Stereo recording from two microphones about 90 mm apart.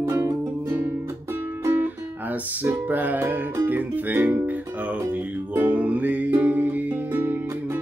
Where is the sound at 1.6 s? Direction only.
20° right (ahead or behind).